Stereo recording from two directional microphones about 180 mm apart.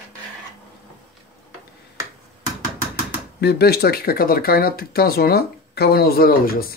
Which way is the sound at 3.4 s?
65° left (ahead or behind).